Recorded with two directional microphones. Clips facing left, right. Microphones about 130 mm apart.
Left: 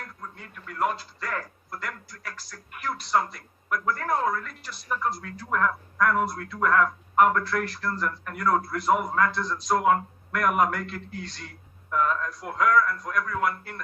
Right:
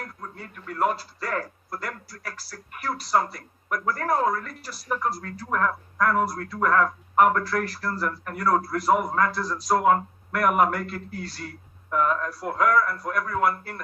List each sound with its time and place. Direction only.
0.0 s a man's voice: 35° right (ahead or behind)